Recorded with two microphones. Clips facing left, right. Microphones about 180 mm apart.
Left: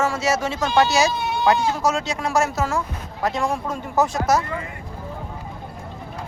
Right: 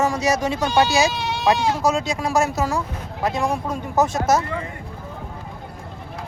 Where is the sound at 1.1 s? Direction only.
85° right.